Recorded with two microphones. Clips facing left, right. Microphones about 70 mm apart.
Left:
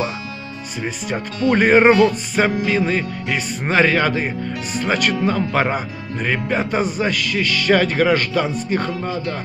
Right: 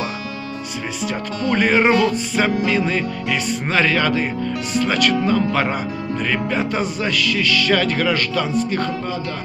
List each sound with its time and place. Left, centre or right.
1.0 s music: centre